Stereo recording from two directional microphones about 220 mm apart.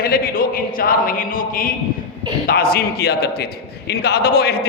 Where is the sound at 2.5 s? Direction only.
45° left (ahead or behind).